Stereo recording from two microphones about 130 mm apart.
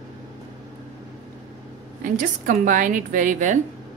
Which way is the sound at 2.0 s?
85° right.